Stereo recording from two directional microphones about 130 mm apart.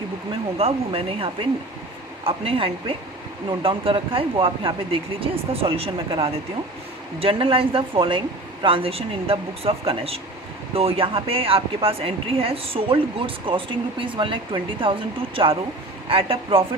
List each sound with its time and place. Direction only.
0.6 s speech: 45° right (ahead or behind)